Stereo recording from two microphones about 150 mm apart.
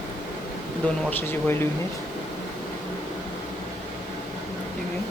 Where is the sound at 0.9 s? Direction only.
15° left (ahead or behind).